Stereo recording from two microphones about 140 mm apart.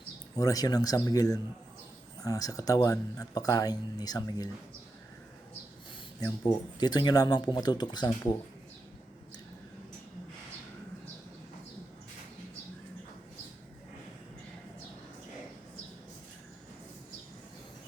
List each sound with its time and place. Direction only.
0.3 s speech: 25° left (ahead or behind)
6.4 s speech: 30° left (ahead or behind)